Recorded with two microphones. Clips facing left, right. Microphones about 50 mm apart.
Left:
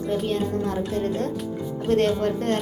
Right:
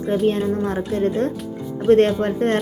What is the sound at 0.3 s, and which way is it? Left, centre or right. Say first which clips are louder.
A woman's voice: right 5 dB; right.